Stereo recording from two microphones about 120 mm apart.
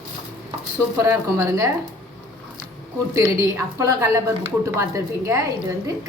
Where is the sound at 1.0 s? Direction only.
25° right (ahead or behind).